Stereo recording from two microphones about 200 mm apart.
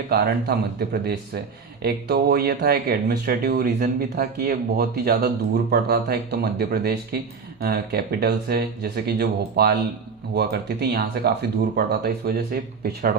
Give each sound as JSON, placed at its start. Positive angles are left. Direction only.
{"t": 0.1, "sound": "speech", "side_deg": -50}